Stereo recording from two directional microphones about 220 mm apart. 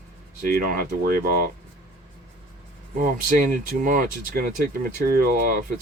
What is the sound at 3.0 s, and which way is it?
Speech, 40° right (ahead or behind).